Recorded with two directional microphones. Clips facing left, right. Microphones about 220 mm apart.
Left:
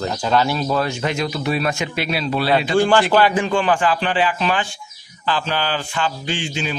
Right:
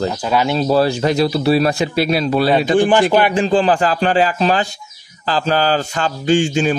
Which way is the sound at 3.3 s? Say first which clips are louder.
Right 4 dB; 30° right (ahead or behind).